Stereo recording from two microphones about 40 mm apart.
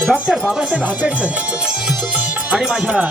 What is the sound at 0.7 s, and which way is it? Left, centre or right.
Speech, right.